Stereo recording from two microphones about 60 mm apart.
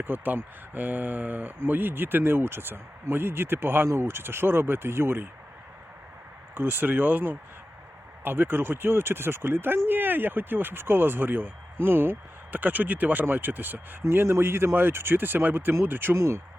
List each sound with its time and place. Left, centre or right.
0.0 s speech: right
6.5 s speech: right
16.1 s speech: right